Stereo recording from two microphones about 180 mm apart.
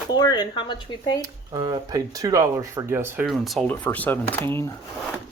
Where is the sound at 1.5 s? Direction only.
25° right (ahead or behind).